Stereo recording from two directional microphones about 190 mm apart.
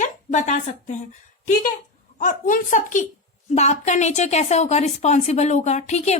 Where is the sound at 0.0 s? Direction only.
40° left (ahead or behind).